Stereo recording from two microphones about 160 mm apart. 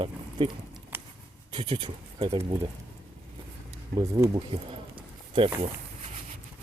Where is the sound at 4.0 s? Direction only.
20° right (ahead or behind).